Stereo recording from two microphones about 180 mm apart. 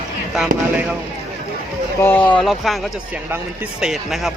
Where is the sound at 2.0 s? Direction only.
10° left (ahead or behind).